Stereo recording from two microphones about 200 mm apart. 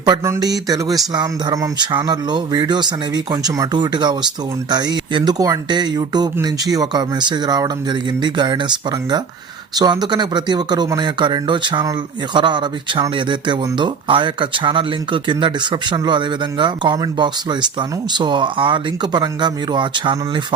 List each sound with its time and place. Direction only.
0.0 s speech: 20° right (ahead or behind)